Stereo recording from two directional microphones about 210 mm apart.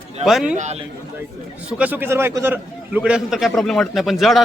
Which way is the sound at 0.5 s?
35° right (ahead or behind).